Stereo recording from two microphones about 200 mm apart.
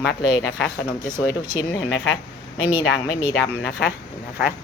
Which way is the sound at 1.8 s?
60° left (ahead or behind).